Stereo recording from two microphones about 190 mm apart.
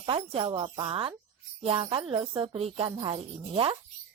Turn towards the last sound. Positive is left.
turn(degrees=-30)  # may be behind; listen again after turning